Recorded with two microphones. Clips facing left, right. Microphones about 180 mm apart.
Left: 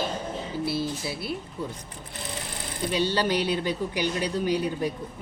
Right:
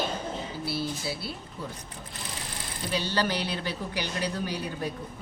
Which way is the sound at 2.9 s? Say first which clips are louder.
Left 4 dB; 20° left (ahead or behind).